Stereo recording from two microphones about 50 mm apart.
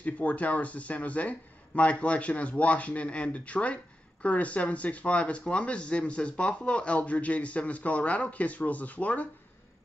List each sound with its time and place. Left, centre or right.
0.0 s speech: left